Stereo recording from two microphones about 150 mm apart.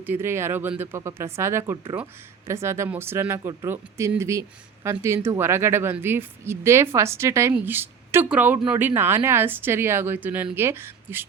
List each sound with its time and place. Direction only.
0.0 s speech: 15° right (ahead or behind)